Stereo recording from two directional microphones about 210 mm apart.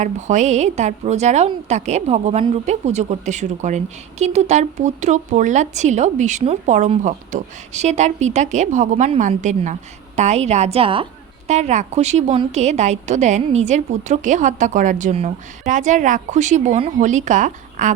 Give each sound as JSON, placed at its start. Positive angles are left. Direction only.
{"t": 0.0, "sound": "a woman's voice", "side_deg": -35}